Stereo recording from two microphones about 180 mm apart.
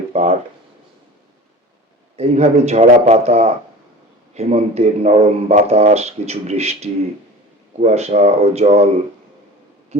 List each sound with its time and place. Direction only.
0.1 s speech: 35° right (ahead or behind)
2.1 s a man's voice: 35° right (ahead or behind)